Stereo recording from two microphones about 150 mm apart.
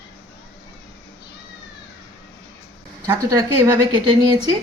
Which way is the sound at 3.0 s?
25° right (ahead or behind).